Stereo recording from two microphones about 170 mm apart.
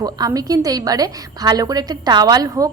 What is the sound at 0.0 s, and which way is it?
A woman's voice, 20° right (ahead or behind).